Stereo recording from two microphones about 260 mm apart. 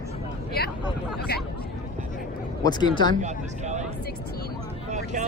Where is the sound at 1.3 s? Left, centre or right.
Left.